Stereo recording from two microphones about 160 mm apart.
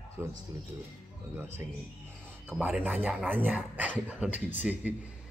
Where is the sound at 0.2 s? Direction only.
10° right (ahead or behind).